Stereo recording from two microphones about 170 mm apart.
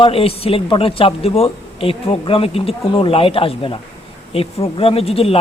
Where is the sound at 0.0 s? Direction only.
35° left (ahead or behind).